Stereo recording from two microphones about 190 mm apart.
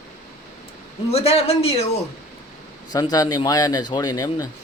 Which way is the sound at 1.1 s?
35° left (ahead or behind).